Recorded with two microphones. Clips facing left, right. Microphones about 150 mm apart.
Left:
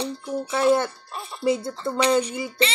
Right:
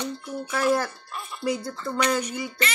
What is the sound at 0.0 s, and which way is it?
Speech, 30° left (ahead or behind).